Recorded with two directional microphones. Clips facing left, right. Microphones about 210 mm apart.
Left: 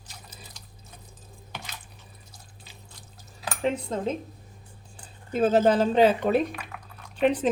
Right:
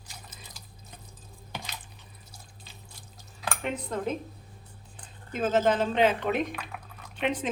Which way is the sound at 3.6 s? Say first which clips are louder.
Left 5 dB; 25° left (ahead or behind).